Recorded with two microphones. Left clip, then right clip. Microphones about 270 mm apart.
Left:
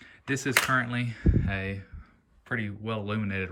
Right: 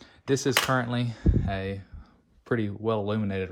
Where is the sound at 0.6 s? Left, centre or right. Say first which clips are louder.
Even; centre.